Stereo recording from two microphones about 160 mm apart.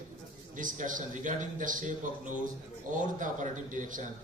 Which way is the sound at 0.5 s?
55° right (ahead or behind).